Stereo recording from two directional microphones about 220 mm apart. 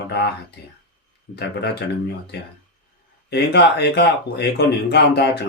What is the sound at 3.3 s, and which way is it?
Speech, 50° left (ahead or behind).